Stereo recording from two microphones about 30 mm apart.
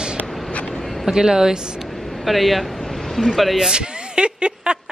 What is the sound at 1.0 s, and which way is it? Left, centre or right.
Speech, right.